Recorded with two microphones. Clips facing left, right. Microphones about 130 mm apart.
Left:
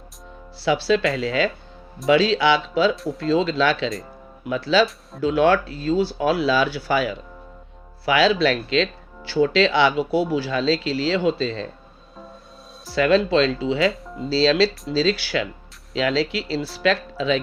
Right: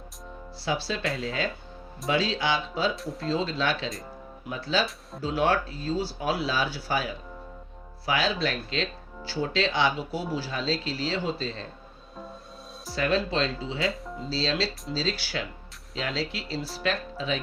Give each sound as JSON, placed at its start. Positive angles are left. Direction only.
{"t": 0.6, "sound": "speech", "side_deg": 85}
{"t": 2.9, "sound": "speech", "side_deg": 0}
{"t": 3.2, "sound": "speech", "side_deg": 90}
{"t": 5.2, "sound": "speech", "side_deg": 70}
{"t": 12.9, "sound": "speech", "side_deg": 90}
{"t": 13.9, "sound": "speech", "side_deg": 0}
{"t": 14.3, "sound": "speech", "side_deg": 85}